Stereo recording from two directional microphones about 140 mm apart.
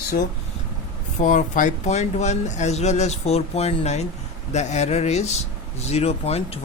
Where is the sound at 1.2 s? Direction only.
65° left (ahead or behind).